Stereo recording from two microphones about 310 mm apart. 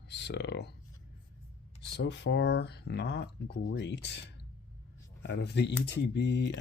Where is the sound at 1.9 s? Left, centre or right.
Left.